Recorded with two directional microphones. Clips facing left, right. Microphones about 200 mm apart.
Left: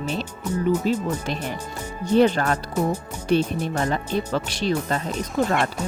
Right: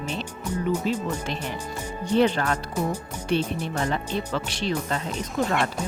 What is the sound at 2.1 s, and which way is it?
Speech, 45° left (ahead or behind).